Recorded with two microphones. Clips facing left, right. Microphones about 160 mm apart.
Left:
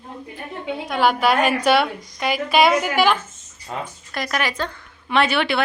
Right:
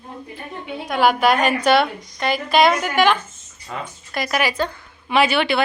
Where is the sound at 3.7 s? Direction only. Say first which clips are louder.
Left 1 dB; 30° left (ahead or behind).